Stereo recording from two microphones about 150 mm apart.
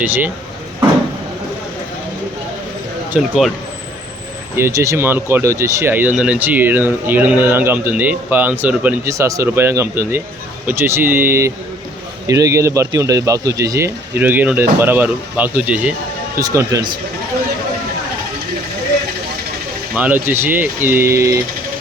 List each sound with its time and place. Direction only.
0.0 s speech: 10° right (ahead or behind)
3.1 s speech: 5° right (ahead or behind)
4.5 s speech: 20° right (ahead or behind)
16.4 s speech: 25° right (ahead or behind)
20.0 s speech: 10° right (ahead or behind)